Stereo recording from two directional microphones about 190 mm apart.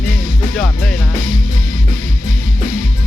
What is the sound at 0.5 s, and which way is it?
Music, 5° left (ahead or behind).